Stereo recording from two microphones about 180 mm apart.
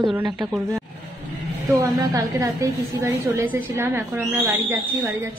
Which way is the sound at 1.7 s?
20° right (ahead or behind).